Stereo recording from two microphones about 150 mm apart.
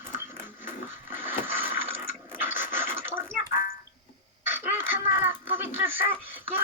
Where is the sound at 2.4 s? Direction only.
15° right (ahead or behind).